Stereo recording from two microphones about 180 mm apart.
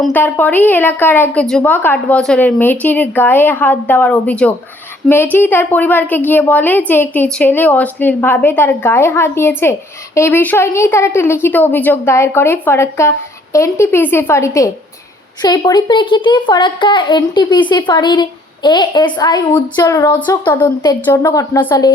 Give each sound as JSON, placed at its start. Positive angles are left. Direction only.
{"t": 0.1, "sound": "a woman's voice", "side_deg": 10}
{"t": 21.0, "sound": "a woman's voice", "side_deg": 15}